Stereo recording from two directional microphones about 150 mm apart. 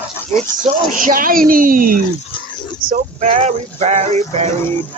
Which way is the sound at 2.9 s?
55° right (ahead or behind).